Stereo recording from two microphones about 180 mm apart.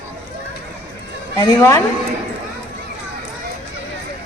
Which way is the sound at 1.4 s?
15° left (ahead or behind).